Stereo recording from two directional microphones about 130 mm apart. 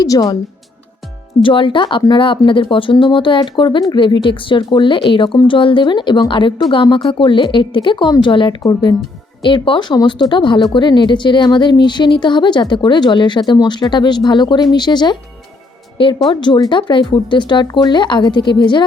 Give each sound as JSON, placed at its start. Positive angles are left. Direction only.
{"t": 0.0, "sound": "speech", "side_deg": 30}
{"t": 1.4, "sound": "speech", "side_deg": 40}